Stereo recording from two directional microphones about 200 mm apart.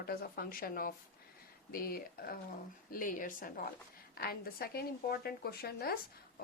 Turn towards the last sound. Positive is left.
turn(degrees=50)  # may be behind; listen again after turning